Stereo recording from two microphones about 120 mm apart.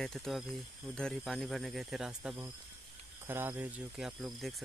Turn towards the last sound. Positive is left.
turn(degrees=0)  # may be behind; listen again after turning